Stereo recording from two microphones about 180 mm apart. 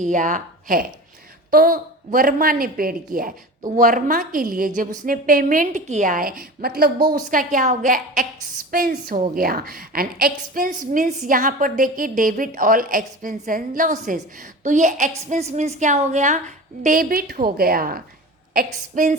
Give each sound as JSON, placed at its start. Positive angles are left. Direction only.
{"t": 0.0, "sound": "a woman's voice", "side_deg": -45}
{"t": 16.8, "sound": "a woman's voice", "side_deg": -50}